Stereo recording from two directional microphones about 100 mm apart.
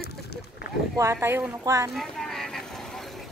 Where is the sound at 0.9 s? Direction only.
25° right (ahead or behind).